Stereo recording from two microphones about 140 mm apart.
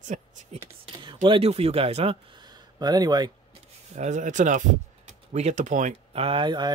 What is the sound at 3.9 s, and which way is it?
Speech, 60° right (ahead or behind).